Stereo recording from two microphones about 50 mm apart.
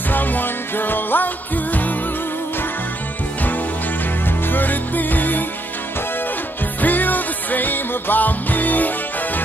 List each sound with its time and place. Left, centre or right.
0.1 s music: left
4.5 s music: left
6.8 s music: left